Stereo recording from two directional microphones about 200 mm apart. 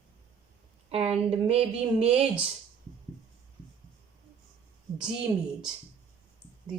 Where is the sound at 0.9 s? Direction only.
30° right (ahead or behind).